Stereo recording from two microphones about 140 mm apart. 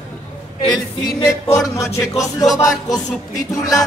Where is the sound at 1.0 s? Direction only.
35° left (ahead or behind).